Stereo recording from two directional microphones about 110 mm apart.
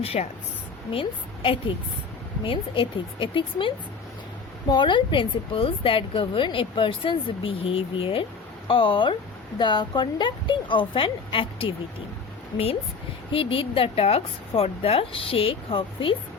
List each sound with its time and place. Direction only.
0.0 s a woman's voice: 70° left (ahead or behind)
0.9 s a woman's voice: 55° left (ahead or behind)
4.7 s a woman's voice: 45° left (ahead or behind)
13.3 s a woman's voice: 55° left (ahead or behind)